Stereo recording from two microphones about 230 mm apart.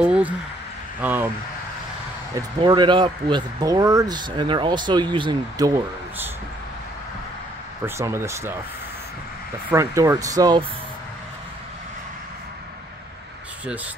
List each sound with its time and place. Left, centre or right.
0.0 s a sound: centre
1.0 s speech: centre
2.3 s speech: centre
7.8 s speech: centre
9.7 s speech: centre